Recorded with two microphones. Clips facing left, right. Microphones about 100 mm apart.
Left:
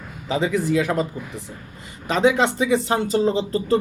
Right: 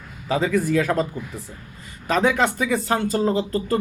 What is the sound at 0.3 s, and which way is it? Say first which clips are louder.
Speech: even; 20° left (ahead or behind).